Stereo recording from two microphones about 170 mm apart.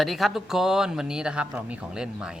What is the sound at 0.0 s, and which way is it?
Speech, centre (ahead or behind).